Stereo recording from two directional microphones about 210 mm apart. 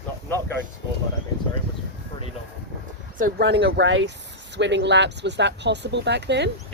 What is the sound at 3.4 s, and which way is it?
Speech, 55° right (ahead or behind).